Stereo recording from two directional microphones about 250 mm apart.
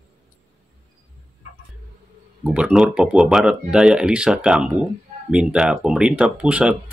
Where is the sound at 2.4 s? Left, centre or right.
Centre.